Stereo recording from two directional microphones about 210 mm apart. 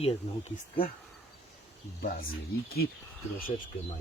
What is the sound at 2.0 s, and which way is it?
Speech, 45° left (ahead or behind).